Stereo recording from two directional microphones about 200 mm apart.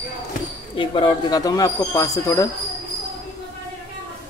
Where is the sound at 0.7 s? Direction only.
25° left (ahead or behind).